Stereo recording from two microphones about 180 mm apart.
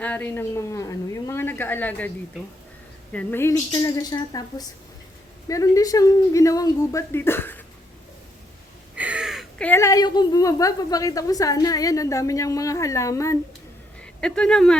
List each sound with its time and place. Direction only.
0.0 s a woman's voice: 10° left (ahead or behind)
3.1 s a woman's voice: 10° left (ahead or behind)
9.0 s a woman's voice: 5° right (ahead or behind); by 13.4 s 15° left (ahead or behind)
14.0 s speech: 5° left (ahead or behind)